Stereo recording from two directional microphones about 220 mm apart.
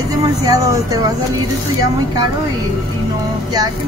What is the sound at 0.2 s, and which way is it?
Speech, 15° right (ahead or behind).